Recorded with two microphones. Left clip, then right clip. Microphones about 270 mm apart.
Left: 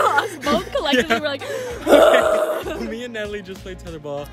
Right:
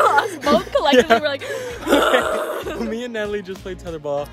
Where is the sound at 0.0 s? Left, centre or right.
Centre.